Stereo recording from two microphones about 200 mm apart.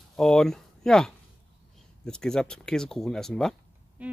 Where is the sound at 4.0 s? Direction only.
5° right (ahead or behind).